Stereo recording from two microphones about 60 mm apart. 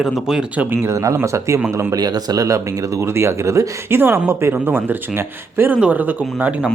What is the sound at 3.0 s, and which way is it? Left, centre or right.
Speech, right.